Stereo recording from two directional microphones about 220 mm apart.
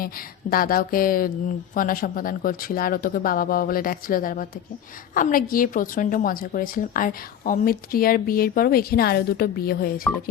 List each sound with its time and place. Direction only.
0.0 s a woman's voice: 40° left (ahead or behind)